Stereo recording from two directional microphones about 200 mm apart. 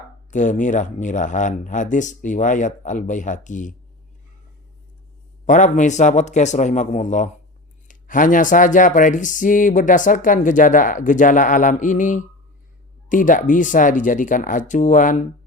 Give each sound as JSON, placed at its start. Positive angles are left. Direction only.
{"t": 0.3, "sound": "speech", "side_deg": 40}
{"t": 5.5, "sound": "speech", "side_deg": 40}